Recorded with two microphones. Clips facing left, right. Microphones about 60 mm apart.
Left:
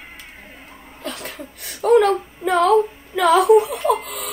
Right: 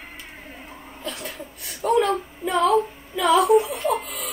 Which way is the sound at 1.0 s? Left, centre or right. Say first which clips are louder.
Left 2 dB; left.